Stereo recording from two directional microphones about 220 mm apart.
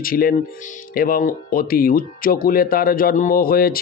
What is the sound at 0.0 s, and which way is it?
Speech, 40° left (ahead or behind).